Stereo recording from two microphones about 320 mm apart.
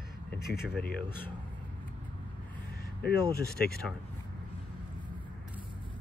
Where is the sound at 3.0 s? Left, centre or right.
Left.